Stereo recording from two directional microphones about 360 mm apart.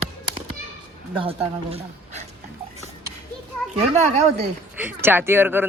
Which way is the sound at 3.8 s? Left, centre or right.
Centre.